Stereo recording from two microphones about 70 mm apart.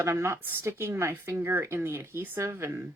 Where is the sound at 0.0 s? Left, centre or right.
Right.